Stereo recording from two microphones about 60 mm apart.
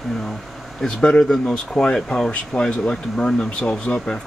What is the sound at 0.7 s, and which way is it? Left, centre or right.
Speech, centre.